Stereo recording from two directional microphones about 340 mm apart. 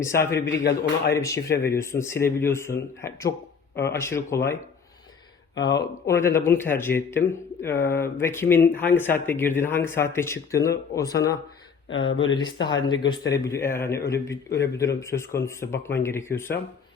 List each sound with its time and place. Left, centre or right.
0.0 s speech: centre
0.6 s a man's voice: left
1.1 s speech: centre
6.1 s speech: centre